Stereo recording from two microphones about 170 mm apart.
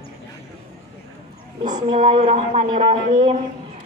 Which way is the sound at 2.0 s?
40° right (ahead or behind).